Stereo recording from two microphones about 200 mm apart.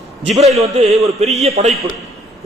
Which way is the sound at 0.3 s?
35° right (ahead or behind).